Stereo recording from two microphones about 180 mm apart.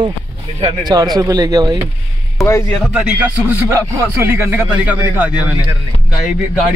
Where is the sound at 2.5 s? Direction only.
15° left (ahead or behind).